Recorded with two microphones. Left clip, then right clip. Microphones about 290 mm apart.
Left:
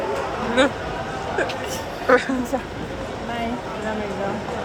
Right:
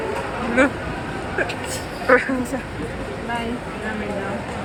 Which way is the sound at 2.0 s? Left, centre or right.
Centre.